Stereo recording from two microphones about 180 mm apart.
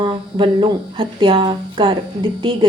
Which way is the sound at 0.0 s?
25° right (ahead or behind).